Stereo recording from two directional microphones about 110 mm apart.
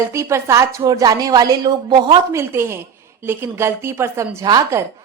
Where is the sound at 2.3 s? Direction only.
25° right (ahead or behind).